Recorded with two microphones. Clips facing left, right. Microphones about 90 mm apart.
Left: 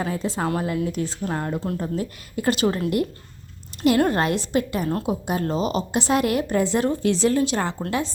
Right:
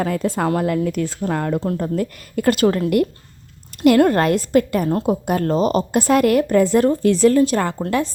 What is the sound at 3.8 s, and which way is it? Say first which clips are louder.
Speech: right 6 dB; 55° right (ahead or behind).